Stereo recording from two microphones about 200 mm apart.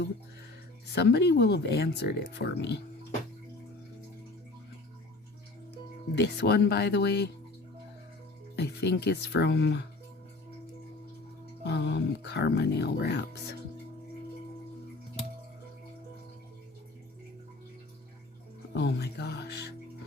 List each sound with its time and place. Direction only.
0.9 s speech: 55° left (ahead or behind)
6.1 s speech: 60° left (ahead or behind)
8.5 s speech: 55° left (ahead or behind)
11.6 s speech: 55° left (ahead or behind)
18.7 s speech: 55° left (ahead or behind)